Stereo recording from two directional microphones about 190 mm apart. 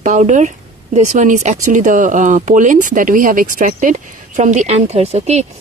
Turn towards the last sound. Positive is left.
turn(degrees=-35)  # may be behind; listen again after turning